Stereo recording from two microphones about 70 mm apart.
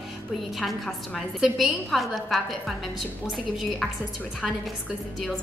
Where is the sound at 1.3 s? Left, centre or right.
Centre.